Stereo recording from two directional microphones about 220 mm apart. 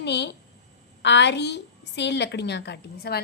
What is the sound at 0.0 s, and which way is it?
A woman's voice, 50° left (ahead or behind).